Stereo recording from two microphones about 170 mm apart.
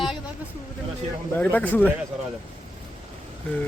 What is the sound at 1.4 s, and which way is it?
Speech, 10° left (ahead or behind).